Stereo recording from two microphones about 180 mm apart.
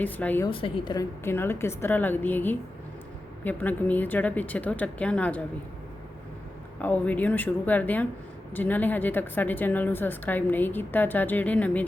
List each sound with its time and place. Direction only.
0.0 s a woman's voice: 10° left (ahead or behind)
0.4 s a woman's voice: 25° left (ahead or behind)
1.2 s a woman's voice: 15° left (ahead or behind)
6.7 s a woman's voice: 10° left (ahead or behind)